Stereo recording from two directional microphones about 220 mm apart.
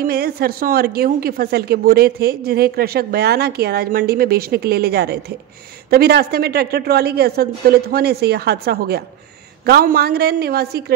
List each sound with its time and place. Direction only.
0.0 s a woman's voice: 45° right (ahead or behind)